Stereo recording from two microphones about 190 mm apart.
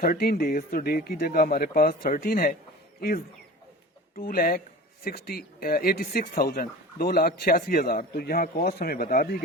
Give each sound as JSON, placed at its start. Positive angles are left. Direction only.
{"t": 0.0, "sound": "speech", "side_deg": 50}
{"t": 4.1, "sound": "speech", "side_deg": 50}